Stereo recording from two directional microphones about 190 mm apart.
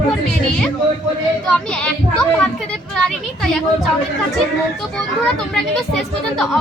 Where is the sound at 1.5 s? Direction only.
5° left (ahead or behind).